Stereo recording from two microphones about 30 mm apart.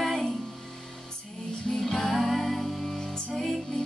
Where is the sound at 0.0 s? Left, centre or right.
Centre.